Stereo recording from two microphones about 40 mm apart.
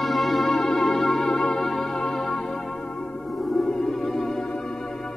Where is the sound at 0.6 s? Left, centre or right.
Centre.